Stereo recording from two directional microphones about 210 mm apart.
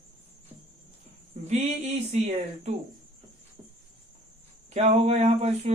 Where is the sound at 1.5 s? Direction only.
30° right (ahead or behind).